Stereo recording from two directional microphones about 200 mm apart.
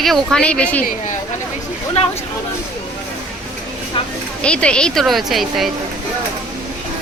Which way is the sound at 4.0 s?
25° left (ahead or behind).